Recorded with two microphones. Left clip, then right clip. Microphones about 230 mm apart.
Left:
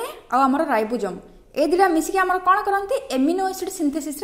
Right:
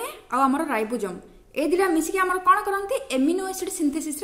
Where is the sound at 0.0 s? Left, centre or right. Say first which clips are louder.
Left 3 dB; centre.